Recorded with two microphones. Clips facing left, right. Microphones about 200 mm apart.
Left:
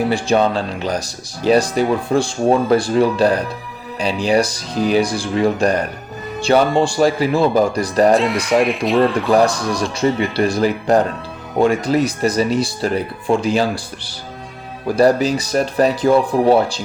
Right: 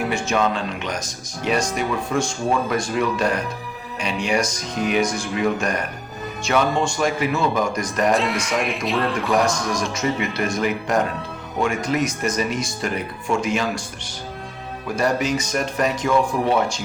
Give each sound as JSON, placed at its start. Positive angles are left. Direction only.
{"t": 0.1, "sound": "speech", "side_deg": 35}
{"t": 8.1, "sound": "speech", "side_deg": 0}
{"t": 9.9, "sound": "speech", "side_deg": 30}